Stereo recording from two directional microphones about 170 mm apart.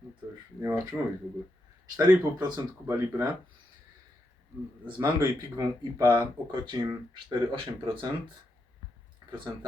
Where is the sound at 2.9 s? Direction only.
15° right (ahead or behind).